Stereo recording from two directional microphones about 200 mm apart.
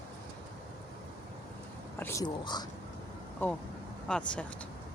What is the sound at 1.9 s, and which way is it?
Speech, 15° left (ahead or behind).